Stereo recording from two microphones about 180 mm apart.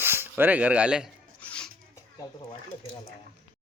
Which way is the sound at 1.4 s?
5° left (ahead or behind).